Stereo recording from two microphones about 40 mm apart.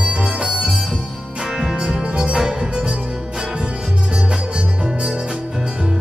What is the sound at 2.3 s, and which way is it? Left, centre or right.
Music, centre.